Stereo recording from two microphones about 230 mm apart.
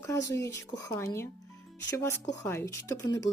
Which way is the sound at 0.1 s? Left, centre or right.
Centre.